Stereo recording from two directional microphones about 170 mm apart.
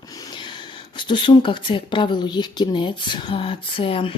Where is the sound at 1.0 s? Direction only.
30° left (ahead or behind).